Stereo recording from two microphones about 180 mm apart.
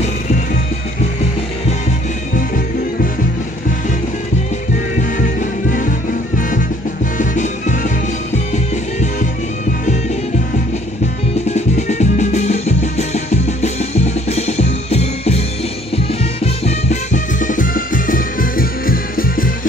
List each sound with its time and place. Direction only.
2.3 s music: 50° left (ahead or behind)
5.4 s music: 50° left (ahead or behind)
11.4 s music: 40° left (ahead or behind)
16.6 s music: 40° left (ahead or behind)